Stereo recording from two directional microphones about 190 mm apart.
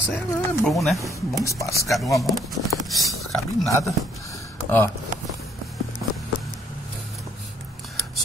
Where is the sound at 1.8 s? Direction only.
Centre (ahead or behind).